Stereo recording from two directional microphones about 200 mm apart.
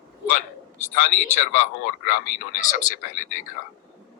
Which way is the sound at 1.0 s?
35° left (ahead or behind).